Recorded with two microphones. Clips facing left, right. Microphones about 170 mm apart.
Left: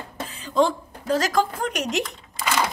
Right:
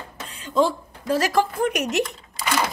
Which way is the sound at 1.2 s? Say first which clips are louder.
Right 3 dB; 10° right (ahead or behind).